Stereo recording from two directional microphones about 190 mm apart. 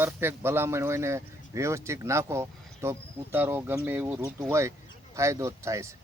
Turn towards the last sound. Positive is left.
turn(degrees=-15)  # may be behind; listen again after turning